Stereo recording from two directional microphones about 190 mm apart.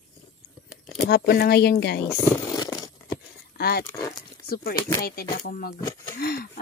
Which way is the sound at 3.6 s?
55° left (ahead or behind).